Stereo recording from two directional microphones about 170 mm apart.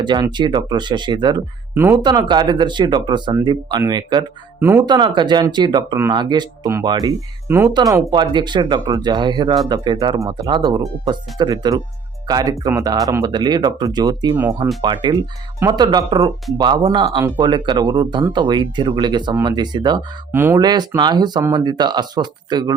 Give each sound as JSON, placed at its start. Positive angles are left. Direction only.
{"t": 0.0, "sound": "speech", "side_deg": -25}
{"t": 1.7, "sound": "speech", "side_deg": -10}
{"t": 2.0, "sound": "speech", "side_deg": -25}
{"t": 4.6, "sound": "speech", "side_deg": -15}
{"t": 4.9, "sound": "speech", "side_deg": -25}
{"t": 7.7, "sound": "speech", "side_deg": -25}
{"t": 20.3, "sound": "speech", "side_deg": -15}
{"t": 20.6, "sound": "speech", "side_deg": -25}